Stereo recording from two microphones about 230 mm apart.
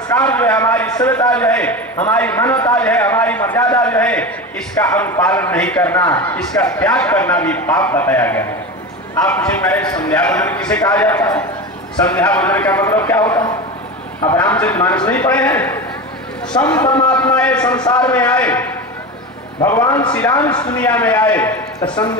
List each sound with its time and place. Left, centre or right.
0.1 s a man's voice: centre
21.8 s speech: centre